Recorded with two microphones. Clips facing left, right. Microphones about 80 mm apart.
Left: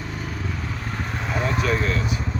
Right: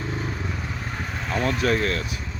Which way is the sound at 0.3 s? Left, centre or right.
Centre.